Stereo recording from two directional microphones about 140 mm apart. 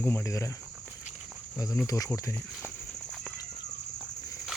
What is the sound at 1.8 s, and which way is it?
Speech, 25° left (ahead or behind).